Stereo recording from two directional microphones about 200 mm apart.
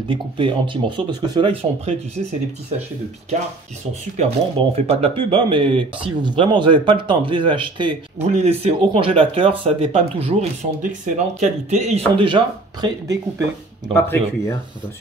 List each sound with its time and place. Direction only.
0.1 s speech: 25° right (ahead or behind)
4.2 s speech: 30° right (ahead or behind)
13.9 s speech: 10° left (ahead or behind)